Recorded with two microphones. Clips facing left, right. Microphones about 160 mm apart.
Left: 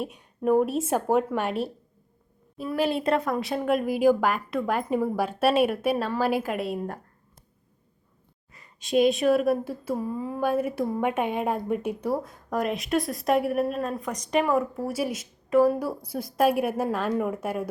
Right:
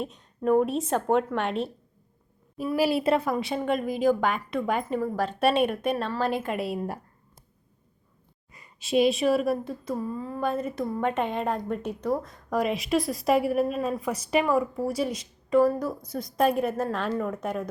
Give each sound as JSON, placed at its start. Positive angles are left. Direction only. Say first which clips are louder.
{"t": 0.0, "sound": "speech", "louder": "left 1 dB", "side_deg": 10}
{"t": 2.6, "sound": "speech", "louder": "right 2 dB", "side_deg": -10}
{"t": 8.5, "sound": "a woman's voice", "louder": "left 1 dB", "side_deg": -10}